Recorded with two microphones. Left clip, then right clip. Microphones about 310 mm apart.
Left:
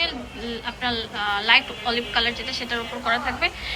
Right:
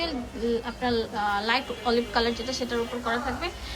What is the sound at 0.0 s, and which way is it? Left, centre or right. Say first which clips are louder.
A woman's voice: left 3 dB; centre.